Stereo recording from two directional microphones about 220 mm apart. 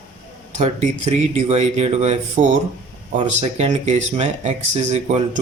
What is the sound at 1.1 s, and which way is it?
Speech, 30° right (ahead or behind).